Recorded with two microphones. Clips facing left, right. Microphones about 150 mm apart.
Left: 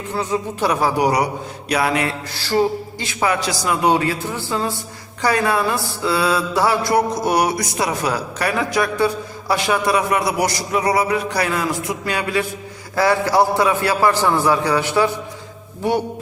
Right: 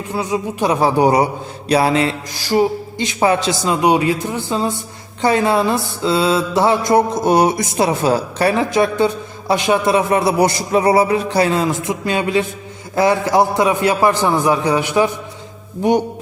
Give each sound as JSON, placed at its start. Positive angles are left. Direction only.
{"t": 0.1, "sound": "mantra", "side_deg": -10}
{"t": 2.3, "sound": "mantra", "side_deg": -15}